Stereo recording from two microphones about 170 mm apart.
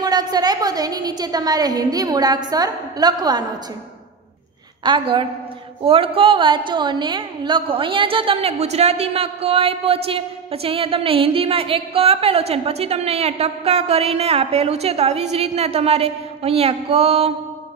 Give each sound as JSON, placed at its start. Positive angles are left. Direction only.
{"t": 0.0, "sound": "a woman's voice", "side_deg": -25}
{"t": 4.8, "sound": "a woman's voice", "side_deg": -30}